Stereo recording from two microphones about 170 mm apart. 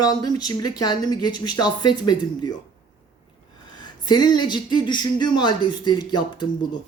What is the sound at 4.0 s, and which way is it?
Speech, 25° left (ahead or behind).